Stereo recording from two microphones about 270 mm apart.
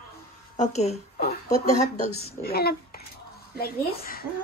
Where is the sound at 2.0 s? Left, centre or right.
Left.